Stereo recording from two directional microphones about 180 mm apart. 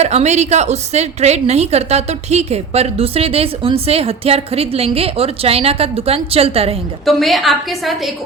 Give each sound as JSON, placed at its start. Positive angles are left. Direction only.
{"t": 0.0, "sound": "a woman's voice", "side_deg": -35}
{"t": 7.0, "sound": "a woman's voice", "side_deg": 0}